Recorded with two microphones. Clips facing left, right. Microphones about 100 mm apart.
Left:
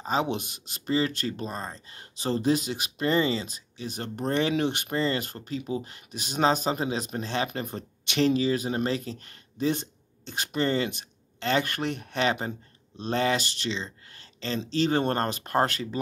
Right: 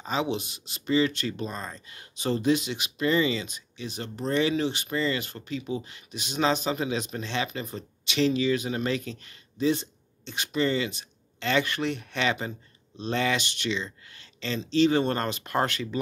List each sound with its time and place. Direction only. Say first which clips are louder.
0.0 s speech: left 1 dB; 45° left (ahead or behind)